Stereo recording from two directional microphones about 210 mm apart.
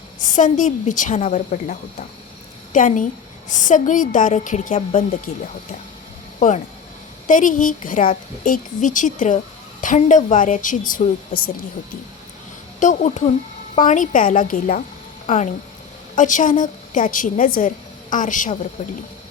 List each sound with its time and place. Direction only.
0.2 s a woman's voice: 35° left (ahead or behind)
7.3 s a woman's voice: 40° left (ahead or behind)
12.8 s a woman's voice: 35° left (ahead or behind)